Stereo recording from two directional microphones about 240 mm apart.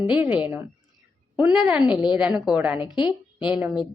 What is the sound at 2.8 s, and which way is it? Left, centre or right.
Speech, centre.